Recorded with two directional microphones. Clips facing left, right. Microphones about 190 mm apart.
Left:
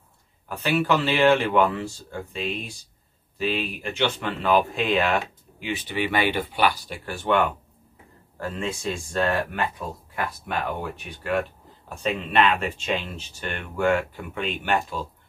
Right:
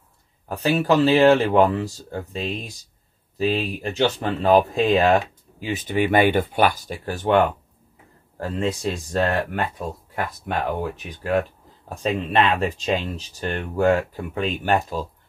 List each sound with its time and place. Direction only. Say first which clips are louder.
0.5 s speech: right 3 dB; 35° right (ahead or behind)